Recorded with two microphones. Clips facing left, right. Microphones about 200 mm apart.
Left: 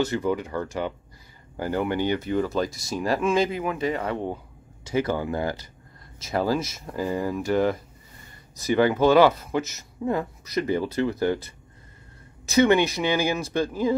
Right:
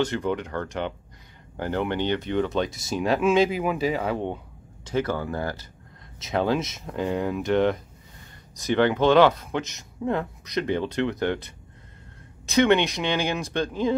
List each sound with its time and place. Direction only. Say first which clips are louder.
0.0 s speech: left 1 dB; 5° left (ahead or behind)
4.8 s speech: left 1 dB; 10° left (ahead or behind)
6.2 s speech: even; 5° left (ahead or behind)